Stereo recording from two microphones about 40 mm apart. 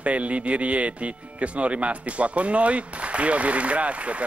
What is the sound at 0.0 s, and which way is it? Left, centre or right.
Speech, right.